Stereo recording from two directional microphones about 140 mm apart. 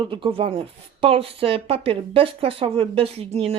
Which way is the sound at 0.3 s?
40° right (ahead or behind).